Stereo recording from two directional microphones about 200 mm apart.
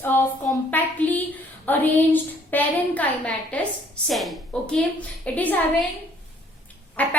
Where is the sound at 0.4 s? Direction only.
10° left (ahead or behind).